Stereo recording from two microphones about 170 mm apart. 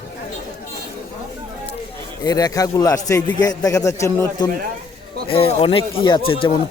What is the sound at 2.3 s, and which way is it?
A man's voice, 20° left (ahead or behind).